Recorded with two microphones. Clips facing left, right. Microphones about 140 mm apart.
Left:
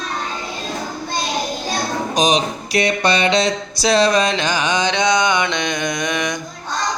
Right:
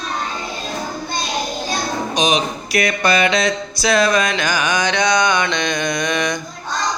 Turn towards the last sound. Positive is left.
turn(degrees=20)  # may be behind; listen again after turning